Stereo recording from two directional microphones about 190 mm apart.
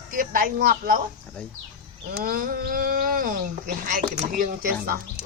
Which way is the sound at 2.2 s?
50° right (ahead or behind).